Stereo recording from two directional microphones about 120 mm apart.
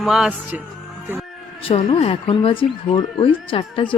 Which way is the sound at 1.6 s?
50° left (ahead or behind).